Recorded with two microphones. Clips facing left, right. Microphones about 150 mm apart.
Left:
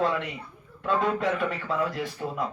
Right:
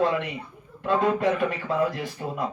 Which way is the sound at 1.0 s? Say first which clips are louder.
Right 3 dB; centre (ahead or behind).